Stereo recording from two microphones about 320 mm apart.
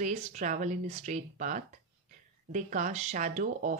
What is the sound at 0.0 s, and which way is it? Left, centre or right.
A woman's voice, right.